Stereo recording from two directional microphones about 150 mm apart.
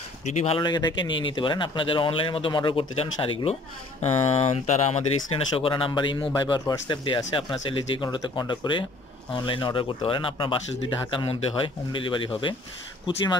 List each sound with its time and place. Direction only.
0.2 s speech: 50° left (ahead or behind)
0.6 s speech: 30° left (ahead or behind)